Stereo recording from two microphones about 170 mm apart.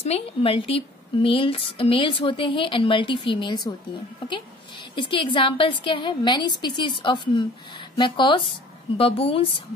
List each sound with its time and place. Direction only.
0.0 s a woman's voice: 35° left (ahead or behind)